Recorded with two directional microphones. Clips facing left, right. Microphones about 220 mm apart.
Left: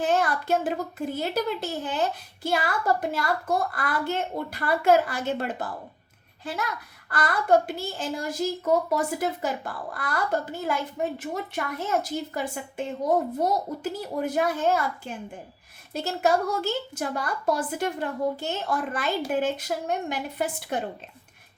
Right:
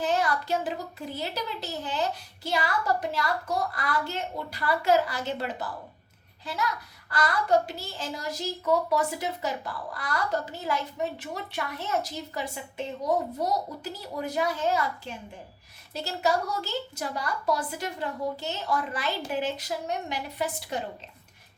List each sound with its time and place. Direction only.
0.0 s a child's voice: 50° left (ahead or behind)